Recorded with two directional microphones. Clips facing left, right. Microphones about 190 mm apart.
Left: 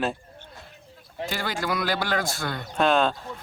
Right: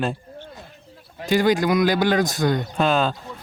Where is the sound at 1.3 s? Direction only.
15° right (ahead or behind).